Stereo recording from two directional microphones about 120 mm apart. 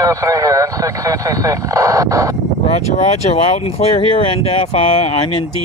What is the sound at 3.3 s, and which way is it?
Speech, 60° left (ahead or behind).